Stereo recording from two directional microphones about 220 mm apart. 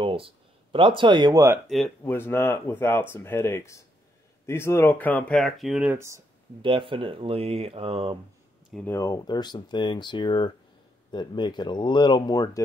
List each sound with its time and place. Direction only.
0.0 s speech: 25° right (ahead or behind)
1.7 s speech: 5° left (ahead or behind); by 6.2 s 10° right (ahead or behind)
6.6 s speech: 25° right (ahead or behind)
8.6 s speech: 5° left (ahead or behind)